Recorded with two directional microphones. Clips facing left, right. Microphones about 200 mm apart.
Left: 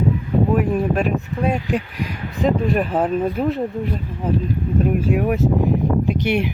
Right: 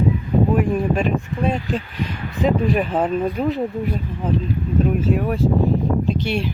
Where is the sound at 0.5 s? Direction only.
Centre (ahead or behind).